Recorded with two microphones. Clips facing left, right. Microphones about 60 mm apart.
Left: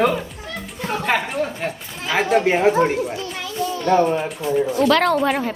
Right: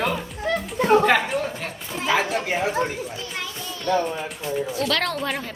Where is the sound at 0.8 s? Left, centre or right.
Right.